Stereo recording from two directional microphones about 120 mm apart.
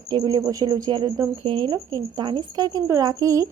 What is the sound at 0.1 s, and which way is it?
Speech, 35° right (ahead or behind).